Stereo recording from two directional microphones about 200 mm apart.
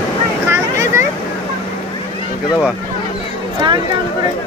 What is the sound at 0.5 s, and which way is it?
Vehicle, 15° right (ahead or behind).